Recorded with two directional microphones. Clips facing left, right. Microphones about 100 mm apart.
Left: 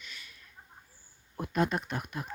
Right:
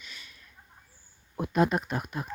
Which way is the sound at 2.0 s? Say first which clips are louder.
Right 3 dB; 25° right (ahead or behind).